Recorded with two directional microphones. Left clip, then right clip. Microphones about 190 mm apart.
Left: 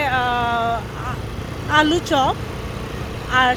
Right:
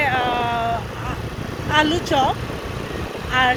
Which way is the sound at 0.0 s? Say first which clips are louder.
Even; 25° left (ahead or behind).